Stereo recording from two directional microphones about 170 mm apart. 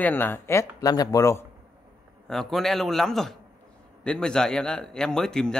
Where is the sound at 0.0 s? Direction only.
10° left (ahead or behind).